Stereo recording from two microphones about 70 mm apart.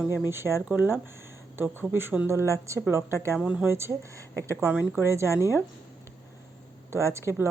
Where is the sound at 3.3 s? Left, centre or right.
Centre.